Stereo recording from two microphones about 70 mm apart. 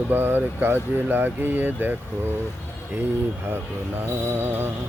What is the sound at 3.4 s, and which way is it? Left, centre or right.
Speech, right.